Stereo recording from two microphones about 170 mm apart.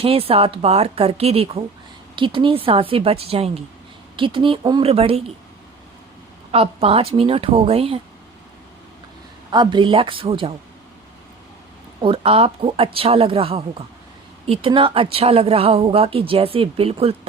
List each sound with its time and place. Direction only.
0.0 s speech: 35° right (ahead or behind)
6.5 s speech: 35° right (ahead or behind)
9.5 s speech: 25° right (ahead or behind)
12.0 s speech: 35° right (ahead or behind)